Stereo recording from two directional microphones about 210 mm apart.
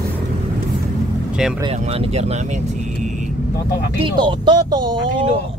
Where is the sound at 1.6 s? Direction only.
30° right (ahead or behind).